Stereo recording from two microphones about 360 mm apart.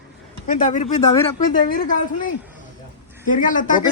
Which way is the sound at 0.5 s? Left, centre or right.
Left.